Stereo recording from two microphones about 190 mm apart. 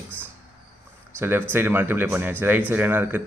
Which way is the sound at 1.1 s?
10° right (ahead or behind).